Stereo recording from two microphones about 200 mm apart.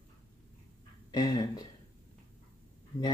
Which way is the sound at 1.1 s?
20° left (ahead or behind).